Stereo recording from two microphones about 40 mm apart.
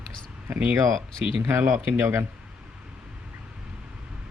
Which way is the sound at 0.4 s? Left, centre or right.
Right.